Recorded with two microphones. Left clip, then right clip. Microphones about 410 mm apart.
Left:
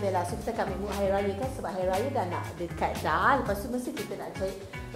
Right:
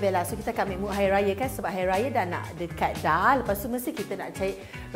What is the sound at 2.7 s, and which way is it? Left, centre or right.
Speech, right.